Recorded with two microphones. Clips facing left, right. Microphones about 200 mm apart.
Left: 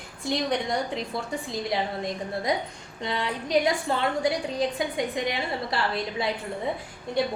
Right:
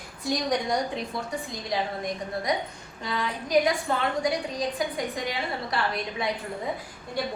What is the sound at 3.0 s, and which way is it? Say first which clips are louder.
A woman's voice: left 1 dB; 25° left (ahead or behind).